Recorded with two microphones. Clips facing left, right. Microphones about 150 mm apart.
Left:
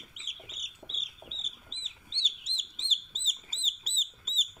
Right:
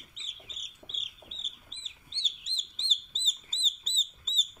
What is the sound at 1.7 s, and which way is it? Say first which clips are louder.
Chicken: left 3 dB; 25° left (ahead or behind).